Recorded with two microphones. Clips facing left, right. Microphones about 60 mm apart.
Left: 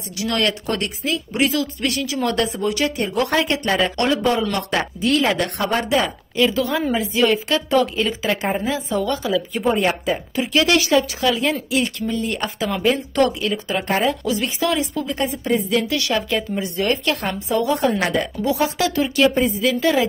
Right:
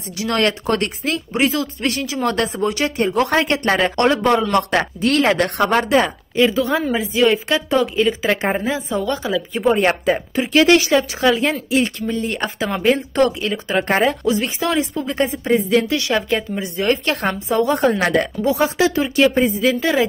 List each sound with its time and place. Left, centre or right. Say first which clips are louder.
0.2 s speech: right 3 dB; right
1.3 s speech: right 1 dB; right
6.3 s a woman's voice: right 3 dB; right
9.8 s speech: right 3 dB; right
10.3 s speech: right 4 dB; right
13.8 s speech: right 2 dB; right
14.2 s a woman's voice: right 2 dB; right
17.7 s speech: right 3 dB; right
18.4 s a woman's voice: right 2 dB; right